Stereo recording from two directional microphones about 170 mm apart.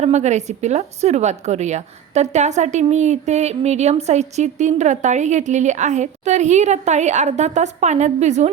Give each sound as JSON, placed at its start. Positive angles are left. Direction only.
{"t": 0.0, "sound": "a woman's voice", "side_deg": -40}